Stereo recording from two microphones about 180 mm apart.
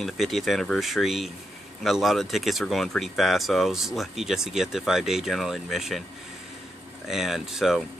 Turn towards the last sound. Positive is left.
turn(degrees=0)  # may be behind; listen again after turning